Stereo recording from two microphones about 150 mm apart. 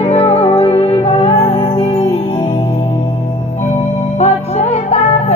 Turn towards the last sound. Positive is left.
turn(degrees=50)  # may be behind; listen again after turning